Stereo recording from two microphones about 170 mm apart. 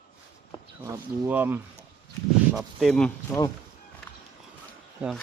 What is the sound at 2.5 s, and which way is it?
Speech, centre (ahead or behind).